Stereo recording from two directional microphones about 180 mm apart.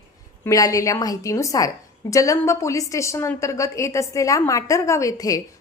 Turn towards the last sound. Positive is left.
turn(degrees=20)  # may be behind; listen again after turning